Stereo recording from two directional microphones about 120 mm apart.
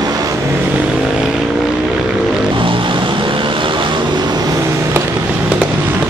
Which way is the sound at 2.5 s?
45° right (ahead or behind).